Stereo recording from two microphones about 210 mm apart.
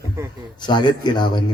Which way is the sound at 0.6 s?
20° left (ahead or behind).